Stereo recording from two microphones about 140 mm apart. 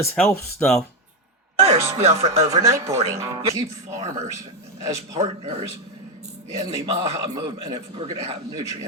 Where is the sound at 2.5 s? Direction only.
20° right (ahead or behind).